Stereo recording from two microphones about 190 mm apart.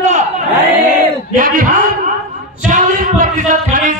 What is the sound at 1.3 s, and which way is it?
Speech, 45° right (ahead or behind).